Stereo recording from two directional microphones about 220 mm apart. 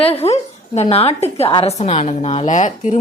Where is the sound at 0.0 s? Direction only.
25° left (ahead or behind).